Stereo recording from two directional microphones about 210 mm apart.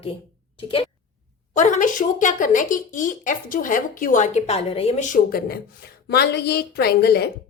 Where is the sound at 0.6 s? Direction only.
25° left (ahead or behind); by 7.3 s 50° left (ahead or behind).